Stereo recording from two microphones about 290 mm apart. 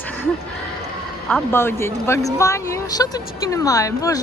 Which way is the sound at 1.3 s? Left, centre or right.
Centre.